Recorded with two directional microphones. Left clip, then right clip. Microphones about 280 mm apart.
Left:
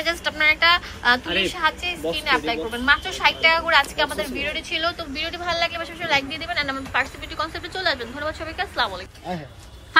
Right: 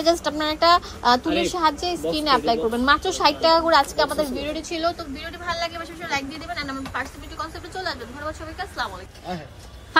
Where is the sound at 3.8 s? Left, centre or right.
Centre.